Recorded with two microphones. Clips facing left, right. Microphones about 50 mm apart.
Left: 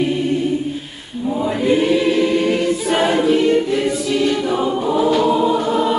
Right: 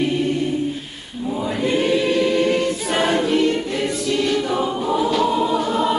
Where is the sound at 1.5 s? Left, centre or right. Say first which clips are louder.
Left 3 dB; centre.